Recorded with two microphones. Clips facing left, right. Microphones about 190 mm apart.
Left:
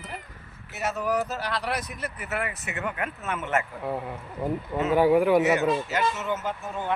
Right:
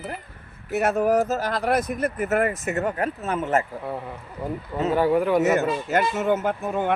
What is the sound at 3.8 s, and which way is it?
Speech, 10° left (ahead or behind).